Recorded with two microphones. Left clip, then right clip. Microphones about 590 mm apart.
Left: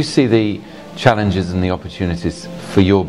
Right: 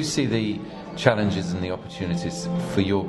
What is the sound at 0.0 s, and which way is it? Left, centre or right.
Speech, left.